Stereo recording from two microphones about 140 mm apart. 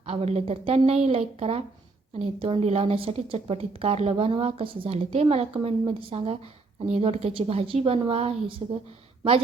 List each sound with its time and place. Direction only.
0.0 s speech: 45° right (ahead or behind)